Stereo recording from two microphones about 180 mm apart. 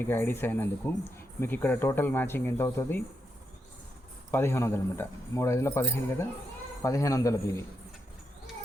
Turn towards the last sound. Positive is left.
turn(degrees=15)  # may be behind; listen again after turning